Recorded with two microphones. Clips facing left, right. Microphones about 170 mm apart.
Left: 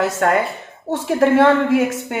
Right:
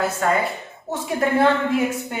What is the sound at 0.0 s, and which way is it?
A woman's voice, 65° left (ahead or behind).